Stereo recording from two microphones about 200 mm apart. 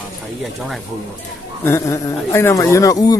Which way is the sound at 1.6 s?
15° left (ahead or behind).